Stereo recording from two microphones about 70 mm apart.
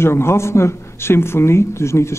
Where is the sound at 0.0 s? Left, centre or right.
Left.